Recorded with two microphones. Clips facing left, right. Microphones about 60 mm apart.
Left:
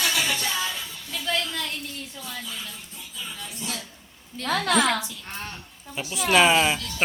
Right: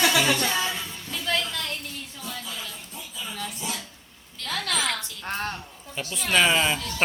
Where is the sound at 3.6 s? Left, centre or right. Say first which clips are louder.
Right 1 dB; centre.